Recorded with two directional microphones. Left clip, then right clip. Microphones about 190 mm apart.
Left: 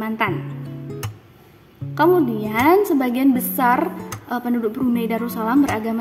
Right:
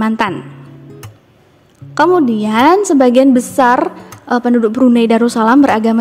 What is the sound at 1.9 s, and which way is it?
A woman's voice, 40° right (ahead or behind).